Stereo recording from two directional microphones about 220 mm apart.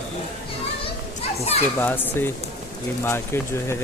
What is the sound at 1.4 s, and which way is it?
Speech, 30° left (ahead or behind).